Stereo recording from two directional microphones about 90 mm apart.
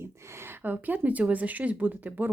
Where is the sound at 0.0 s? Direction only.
25° right (ahead or behind).